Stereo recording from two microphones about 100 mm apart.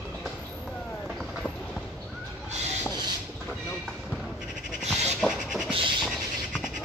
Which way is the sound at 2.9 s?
45° right (ahead or behind).